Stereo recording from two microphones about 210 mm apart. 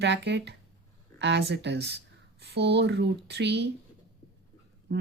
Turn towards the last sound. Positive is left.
turn(degrees=-50)  # may be behind; listen again after turning